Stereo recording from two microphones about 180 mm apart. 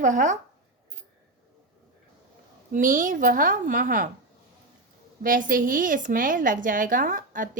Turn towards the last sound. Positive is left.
turn(degrees=-45)  # may be behind; listen again after turning